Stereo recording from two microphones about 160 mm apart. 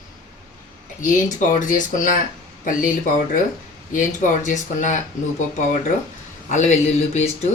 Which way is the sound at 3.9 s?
55° left (ahead or behind).